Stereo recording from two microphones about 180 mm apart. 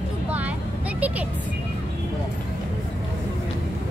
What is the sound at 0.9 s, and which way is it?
Vehicle, 10° right (ahead or behind).